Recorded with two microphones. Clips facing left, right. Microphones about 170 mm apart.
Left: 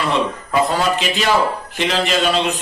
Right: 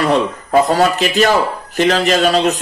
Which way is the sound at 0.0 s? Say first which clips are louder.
Right 5 dB; 45° right (ahead or behind).